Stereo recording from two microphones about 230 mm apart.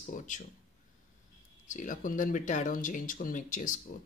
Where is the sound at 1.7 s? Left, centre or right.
Left.